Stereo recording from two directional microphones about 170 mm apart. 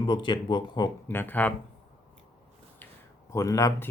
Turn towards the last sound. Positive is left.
turn(degrees=20)  # may be behind; listen again after turning